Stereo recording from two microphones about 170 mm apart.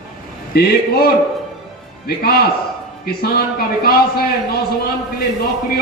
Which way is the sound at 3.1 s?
65° left (ahead or behind).